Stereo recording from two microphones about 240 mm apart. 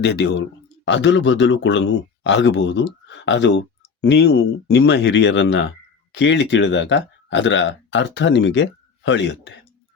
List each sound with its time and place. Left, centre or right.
0.0 s speech: left